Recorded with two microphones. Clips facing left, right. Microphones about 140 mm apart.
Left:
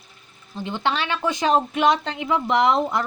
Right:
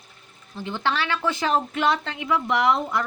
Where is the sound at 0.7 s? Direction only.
20° left (ahead or behind).